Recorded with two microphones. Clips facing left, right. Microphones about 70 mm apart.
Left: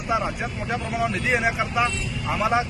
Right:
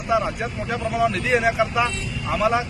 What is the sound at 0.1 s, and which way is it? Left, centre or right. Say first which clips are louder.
Speech: right 3 dB; centre.